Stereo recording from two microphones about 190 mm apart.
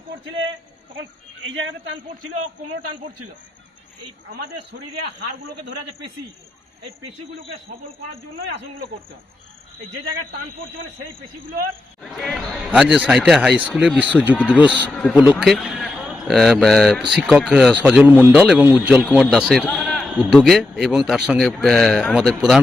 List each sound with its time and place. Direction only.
0.9 s a man's voice: 85° right
12.1 s a man's voice: centre (ahead or behind)
14.3 s speech: 5° left (ahead or behind)
15.3 s a man's voice: 5° right (ahead or behind)